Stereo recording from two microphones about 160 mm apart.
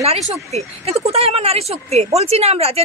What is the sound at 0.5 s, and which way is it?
A woman's voice, 40° right (ahead or behind).